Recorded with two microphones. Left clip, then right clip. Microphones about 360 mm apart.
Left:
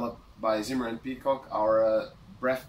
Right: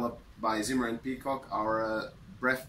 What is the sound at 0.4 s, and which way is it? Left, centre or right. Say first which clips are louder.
Speech: left 2 dB; centre.